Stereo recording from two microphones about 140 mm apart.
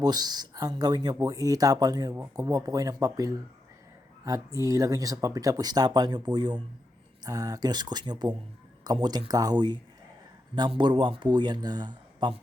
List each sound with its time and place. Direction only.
0.0 s a man's voice: 30° right (ahead or behind)